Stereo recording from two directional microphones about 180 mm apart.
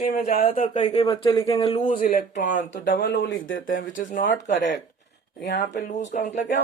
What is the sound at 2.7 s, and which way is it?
Speech, 90° left.